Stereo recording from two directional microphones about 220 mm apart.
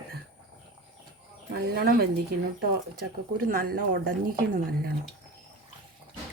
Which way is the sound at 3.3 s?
40° right (ahead or behind).